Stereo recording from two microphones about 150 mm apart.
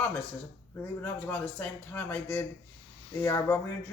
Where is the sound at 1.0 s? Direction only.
10° left (ahead or behind).